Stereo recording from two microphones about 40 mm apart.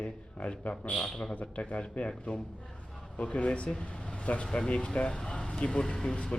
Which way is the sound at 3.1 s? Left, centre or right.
Left.